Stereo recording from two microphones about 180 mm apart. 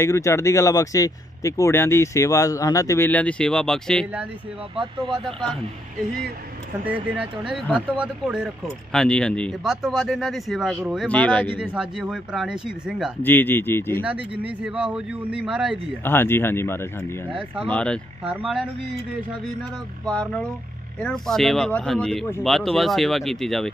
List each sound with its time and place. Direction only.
0.0 s speech: 15° left (ahead or behind)
4.7 s speech: 25° right (ahead or behind)
6.8 s a man's voice: 10° right (ahead or behind)
11.1 s speech: 10° left (ahead or behind)
11.5 s speech: 5° right (ahead or behind)
13.2 s speech: 10° left (ahead or behind)
14.0 s a man's voice: 5° right (ahead or behind)
16.0 s speech: 10° left (ahead or behind); by 18.7 s 5° right (ahead or behind)
20.1 s speech: 5° left (ahead or behind)